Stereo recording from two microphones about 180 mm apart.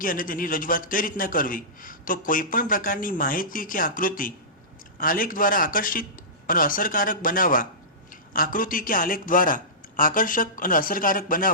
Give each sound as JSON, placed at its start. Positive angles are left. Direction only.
{"t": 0.0, "sound": "a man's voice", "side_deg": 50}